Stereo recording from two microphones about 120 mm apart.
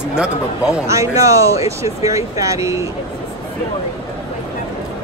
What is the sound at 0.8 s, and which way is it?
Speech, 25° right (ahead or behind).